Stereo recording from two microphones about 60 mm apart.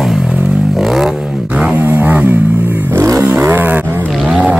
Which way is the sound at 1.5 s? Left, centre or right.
Right.